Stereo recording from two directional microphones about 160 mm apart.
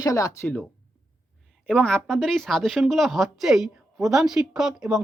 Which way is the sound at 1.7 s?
5° left (ahead or behind).